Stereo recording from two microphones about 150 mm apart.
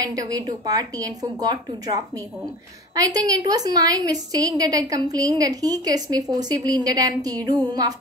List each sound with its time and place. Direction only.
0.0 s a woman's voice: 25° right (ahead or behind)